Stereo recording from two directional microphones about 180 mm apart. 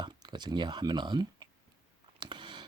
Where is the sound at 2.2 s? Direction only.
25° right (ahead or behind).